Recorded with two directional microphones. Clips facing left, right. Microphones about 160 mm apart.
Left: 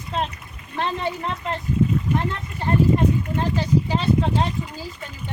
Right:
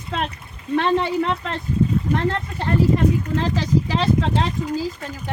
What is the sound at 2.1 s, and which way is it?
Speech, 35° right (ahead or behind).